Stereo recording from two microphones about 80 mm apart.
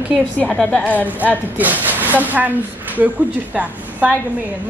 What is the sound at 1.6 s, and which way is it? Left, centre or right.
Speech, right.